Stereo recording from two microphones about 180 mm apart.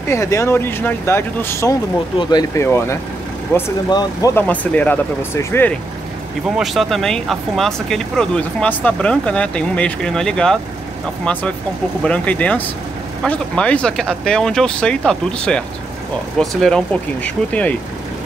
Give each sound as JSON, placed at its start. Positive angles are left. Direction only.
{"t": 0.1, "sound": "speech", "side_deg": 15}
{"t": 6.5, "sound": "speech", "side_deg": 0}
{"t": 12.0, "sound": "speech", "side_deg": 5}